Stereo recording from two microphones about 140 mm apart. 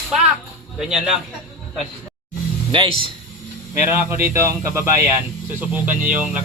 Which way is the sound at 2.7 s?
40° right (ahead or behind).